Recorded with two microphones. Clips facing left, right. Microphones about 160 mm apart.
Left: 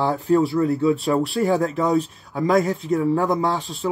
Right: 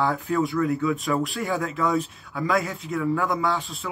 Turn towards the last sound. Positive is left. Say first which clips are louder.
# left 4 dB
turn(degrees=35)  # may be behind; listen again after turning